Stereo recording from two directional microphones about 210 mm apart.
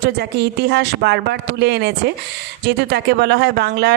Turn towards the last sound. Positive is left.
turn(degrees=-50)  # may be behind; listen again after turning